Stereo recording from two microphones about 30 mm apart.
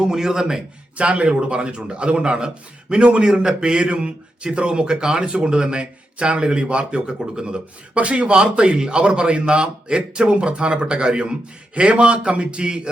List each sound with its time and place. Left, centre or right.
0.0 s a man's voice: centre
0.9 s a man's voice: right